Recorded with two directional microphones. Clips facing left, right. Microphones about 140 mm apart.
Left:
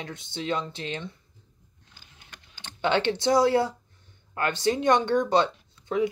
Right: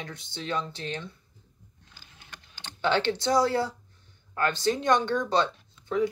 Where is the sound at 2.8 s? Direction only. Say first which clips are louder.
Left 2 dB; 20° left (ahead or behind).